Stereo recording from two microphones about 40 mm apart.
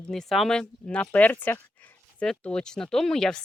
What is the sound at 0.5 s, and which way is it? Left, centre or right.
Speech, left.